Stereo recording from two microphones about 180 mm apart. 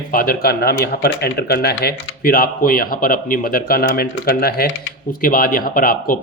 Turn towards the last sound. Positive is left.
turn(degrees=50)  # may be behind; listen again after turning